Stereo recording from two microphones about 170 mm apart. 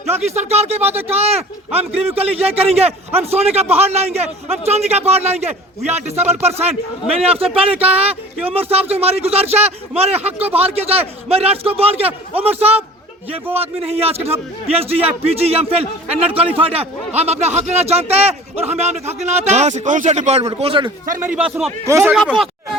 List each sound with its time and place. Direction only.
0.2 s a man's voice: 40° right (ahead or behind)
21.2 s a man's voice: 10° right (ahead or behind)
22.1 s speech: centre (ahead or behind)